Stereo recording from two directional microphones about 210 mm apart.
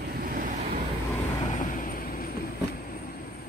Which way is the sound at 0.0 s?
45° right (ahead or behind).